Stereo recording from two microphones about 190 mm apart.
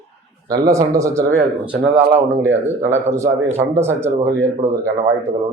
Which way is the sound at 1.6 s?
5° right (ahead or behind).